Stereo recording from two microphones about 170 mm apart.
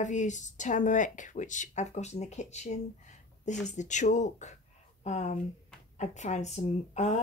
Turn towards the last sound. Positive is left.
turn(degrees=40)  # may be behind; listen again after turning